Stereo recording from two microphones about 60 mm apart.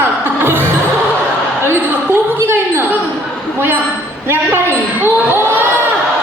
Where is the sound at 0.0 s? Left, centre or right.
Right.